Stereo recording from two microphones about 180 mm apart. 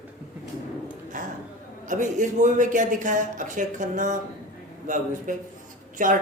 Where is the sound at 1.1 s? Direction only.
45° right (ahead or behind).